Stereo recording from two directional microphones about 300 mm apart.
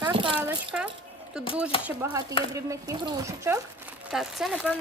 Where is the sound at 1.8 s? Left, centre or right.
Centre.